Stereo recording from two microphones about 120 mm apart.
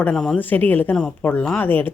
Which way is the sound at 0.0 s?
5° left (ahead or behind).